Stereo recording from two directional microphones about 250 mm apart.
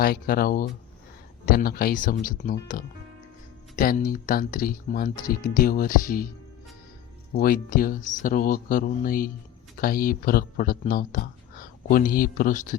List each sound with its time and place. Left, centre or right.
0.0 s speech: left
7.3 s speech: left